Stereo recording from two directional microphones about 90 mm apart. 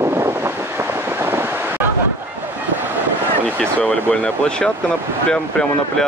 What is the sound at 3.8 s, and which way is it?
Speech, 15° left (ahead or behind).